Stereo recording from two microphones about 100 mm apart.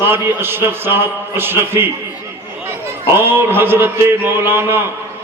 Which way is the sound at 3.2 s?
20° right (ahead or behind).